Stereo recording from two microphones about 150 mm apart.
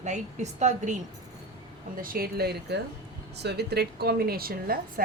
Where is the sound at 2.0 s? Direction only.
75° right (ahead or behind).